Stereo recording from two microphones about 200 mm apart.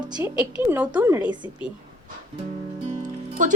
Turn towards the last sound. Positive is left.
turn(degrees=-40)  # may be behind; listen again after turning